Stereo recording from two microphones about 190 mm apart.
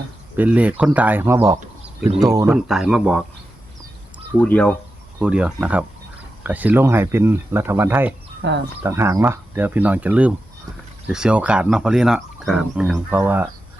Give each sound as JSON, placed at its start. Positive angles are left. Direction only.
{"t": 0.3, "sound": "speech", "side_deg": -10}
{"t": 2.5, "sound": "speech", "side_deg": 0}
{"t": 4.4, "sound": "speech", "side_deg": 10}
{"t": 5.2, "sound": "speech", "side_deg": -5}
{"t": 8.4, "sound": "speech", "side_deg": -65}
{"t": 8.8, "sound": "speech", "side_deg": -15}